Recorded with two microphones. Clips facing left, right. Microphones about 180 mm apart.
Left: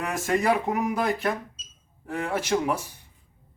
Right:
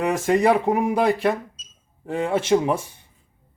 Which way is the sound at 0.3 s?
30° right (ahead or behind).